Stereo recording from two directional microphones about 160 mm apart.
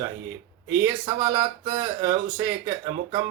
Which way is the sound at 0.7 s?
15° right (ahead or behind).